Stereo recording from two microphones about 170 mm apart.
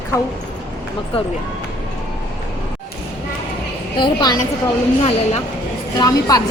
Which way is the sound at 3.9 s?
25° left (ahead or behind).